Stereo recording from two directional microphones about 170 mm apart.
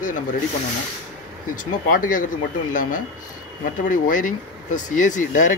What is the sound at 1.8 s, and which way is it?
Speech, 50° left (ahead or behind).